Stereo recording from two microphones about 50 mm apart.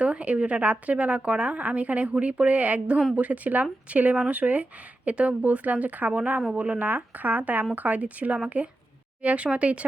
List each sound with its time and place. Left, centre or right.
0.0 s a woman's voice: right
6.7 s a woman's voice: right